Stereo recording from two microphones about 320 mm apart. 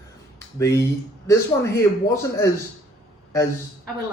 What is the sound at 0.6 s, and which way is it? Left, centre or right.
Speech, centre.